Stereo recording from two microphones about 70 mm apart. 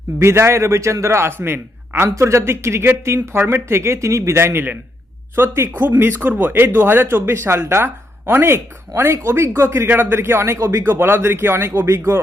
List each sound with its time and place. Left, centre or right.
0.2 s speech: right
2.0 s speech: right
10.6 s speech: right
10.8 s speech: right